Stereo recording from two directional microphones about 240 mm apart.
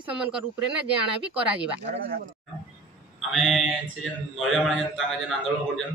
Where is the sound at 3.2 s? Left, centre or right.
Centre.